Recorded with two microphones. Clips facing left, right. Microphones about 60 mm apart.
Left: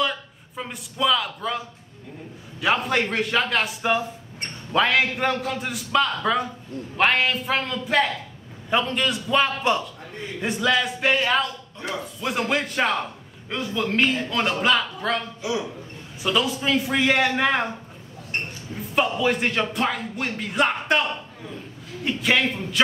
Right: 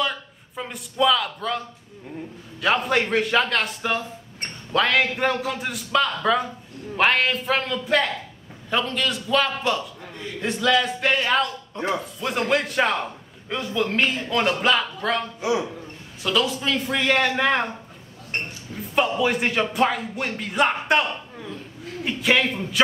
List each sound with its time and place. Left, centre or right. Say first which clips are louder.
0.0 s a man's voice: left 1 dB; centre
8.6 s a man's voice: left 1 dB; centre
16.2 s a man's voice: even; centre
18.8 s a man's voice: right 1 dB; centre